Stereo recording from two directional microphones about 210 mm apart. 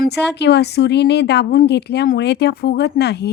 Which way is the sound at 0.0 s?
55° left (ahead or behind).